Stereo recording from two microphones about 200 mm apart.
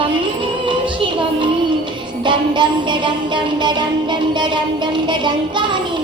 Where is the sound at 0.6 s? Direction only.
25° right (ahead or behind).